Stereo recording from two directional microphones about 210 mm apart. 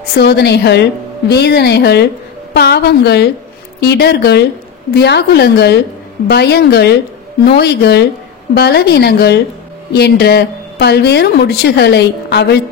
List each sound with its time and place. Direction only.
0.2 s speech: 50° left (ahead or behind)